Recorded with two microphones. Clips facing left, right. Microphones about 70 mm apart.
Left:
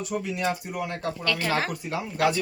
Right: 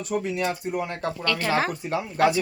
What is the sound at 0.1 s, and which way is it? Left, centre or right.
Speech, right.